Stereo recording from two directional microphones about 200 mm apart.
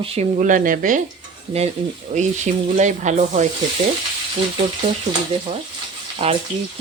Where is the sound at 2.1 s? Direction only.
35° right (ahead or behind).